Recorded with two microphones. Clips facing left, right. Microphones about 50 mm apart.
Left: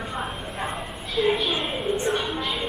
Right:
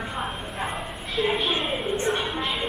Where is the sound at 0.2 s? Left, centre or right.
Centre.